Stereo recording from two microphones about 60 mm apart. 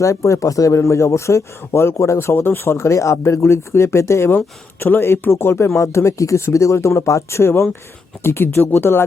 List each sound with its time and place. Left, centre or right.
0.0 s speech: left
4.8 s speech: left